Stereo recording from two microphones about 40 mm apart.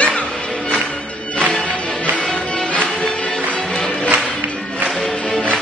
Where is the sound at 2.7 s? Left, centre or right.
Left.